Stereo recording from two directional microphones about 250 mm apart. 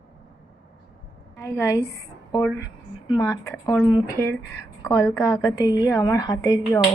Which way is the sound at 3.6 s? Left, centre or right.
Centre.